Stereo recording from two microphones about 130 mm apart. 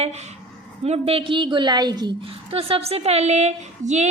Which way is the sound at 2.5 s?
45° right (ahead or behind).